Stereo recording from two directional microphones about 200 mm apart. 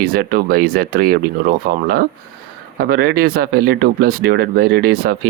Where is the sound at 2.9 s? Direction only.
50° right (ahead or behind).